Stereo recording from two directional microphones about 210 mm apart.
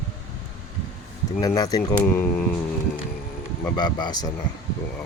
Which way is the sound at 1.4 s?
20° left (ahead or behind).